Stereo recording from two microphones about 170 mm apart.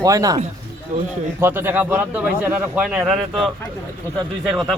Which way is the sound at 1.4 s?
15° right (ahead or behind).